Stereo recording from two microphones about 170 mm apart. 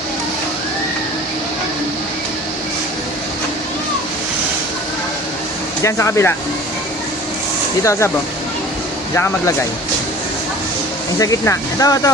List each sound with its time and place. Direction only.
5.8 s speech: 15° left (ahead or behind)
7.9 s speech: 15° left (ahead or behind)
11.2 s speech: 20° left (ahead or behind)